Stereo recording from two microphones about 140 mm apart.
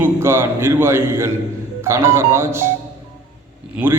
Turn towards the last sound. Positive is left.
turn(degrees=-15)  # may be behind; listen again after turning